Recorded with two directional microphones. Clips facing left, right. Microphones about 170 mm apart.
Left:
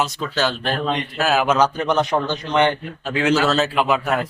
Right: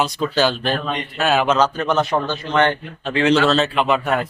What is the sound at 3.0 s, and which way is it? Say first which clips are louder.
Speech: right 2 dB; 5° left (ahead or behind).